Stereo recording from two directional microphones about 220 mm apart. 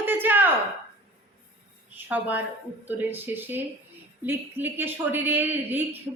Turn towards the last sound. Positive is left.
turn(degrees=-10)  # may be behind; listen again after turning